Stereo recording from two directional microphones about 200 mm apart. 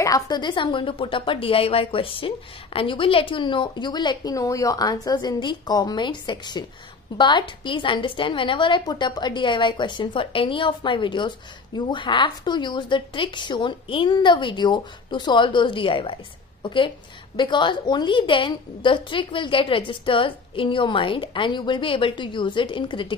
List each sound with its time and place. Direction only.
0.0 s a woman's voice: 20° left (ahead or behind)